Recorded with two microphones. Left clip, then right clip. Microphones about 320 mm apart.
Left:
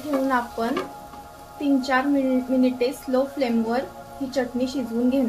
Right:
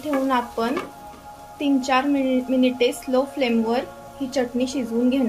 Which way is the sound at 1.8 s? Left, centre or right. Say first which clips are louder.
Right 2 dB; centre.